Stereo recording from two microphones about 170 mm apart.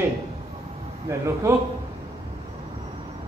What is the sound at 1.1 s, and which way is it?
Speech, 20° right (ahead or behind).